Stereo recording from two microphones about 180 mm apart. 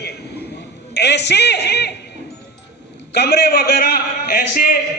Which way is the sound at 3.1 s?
65° left (ahead or behind).